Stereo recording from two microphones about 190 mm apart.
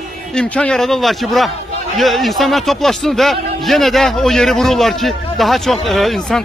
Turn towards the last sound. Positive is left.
turn(degrees=0)  # may be behind; listen again after turning